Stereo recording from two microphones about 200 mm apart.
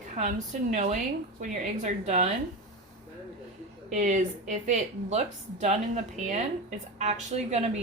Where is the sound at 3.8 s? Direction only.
40° right (ahead or behind).